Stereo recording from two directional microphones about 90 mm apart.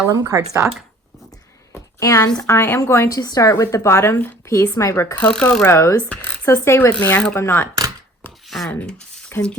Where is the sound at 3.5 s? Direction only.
35° left (ahead or behind).